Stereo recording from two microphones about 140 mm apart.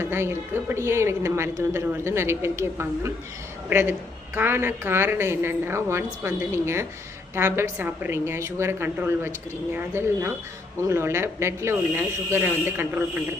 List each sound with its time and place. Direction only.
0.0 s a woman's voice: 20° right (ahead or behind)